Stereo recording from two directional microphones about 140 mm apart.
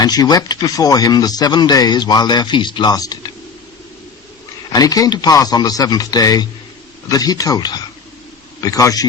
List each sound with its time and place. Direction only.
0.0 s speech: 30° left (ahead or behind)
4.7 s speech: 25° left (ahead or behind)